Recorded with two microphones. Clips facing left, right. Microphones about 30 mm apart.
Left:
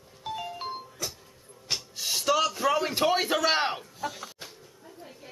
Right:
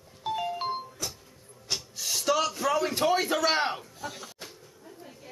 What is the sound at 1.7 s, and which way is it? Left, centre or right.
Music, centre.